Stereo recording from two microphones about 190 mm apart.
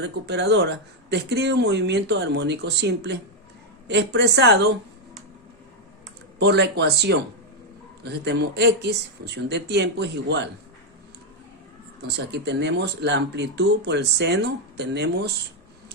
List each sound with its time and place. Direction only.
0.0 s speech: 65° right (ahead or behind)
6.4 s speech: 65° right (ahead or behind)
12.0 s speech: 65° right (ahead or behind)